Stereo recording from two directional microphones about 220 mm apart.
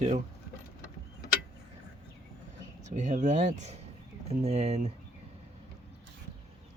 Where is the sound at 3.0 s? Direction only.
35° right (ahead or behind).